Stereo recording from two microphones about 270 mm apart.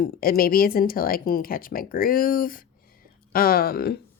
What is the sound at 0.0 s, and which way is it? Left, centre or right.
Speech, left.